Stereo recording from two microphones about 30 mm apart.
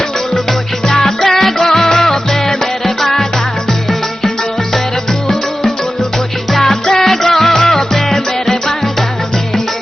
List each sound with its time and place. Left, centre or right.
0.9 s music: centre
5.3 s music: centre